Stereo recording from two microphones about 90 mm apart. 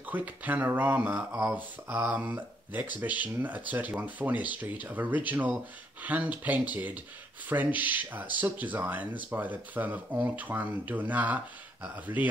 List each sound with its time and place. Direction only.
0.1 s speech: 20° right (ahead or behind)